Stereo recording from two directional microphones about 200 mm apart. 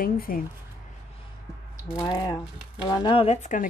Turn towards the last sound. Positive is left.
turn(degrees=35)  # may be behind; listen again after turning